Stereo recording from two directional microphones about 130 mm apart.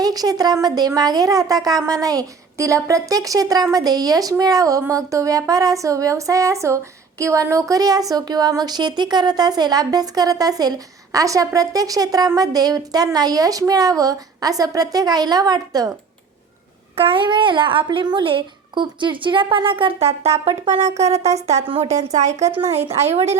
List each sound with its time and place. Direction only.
0.0 s speech: 30° right (ahead or behind)
16.9 s speech: 45° right (ahead or behind)
21.8 s speech: 60° right (ahead or behind)